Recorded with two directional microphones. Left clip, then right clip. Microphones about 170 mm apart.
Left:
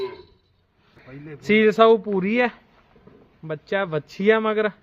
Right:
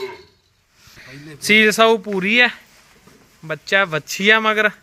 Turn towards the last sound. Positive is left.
turn(degrees=5)  # may be behind; listen again after turning